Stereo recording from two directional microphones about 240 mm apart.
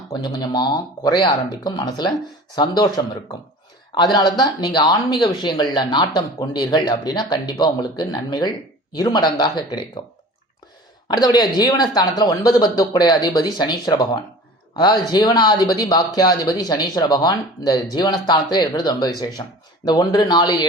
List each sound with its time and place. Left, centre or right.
0.1 s speech: centre
11.2 s speech: centre